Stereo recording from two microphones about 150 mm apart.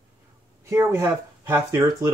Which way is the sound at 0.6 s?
20° right (ahead or behind).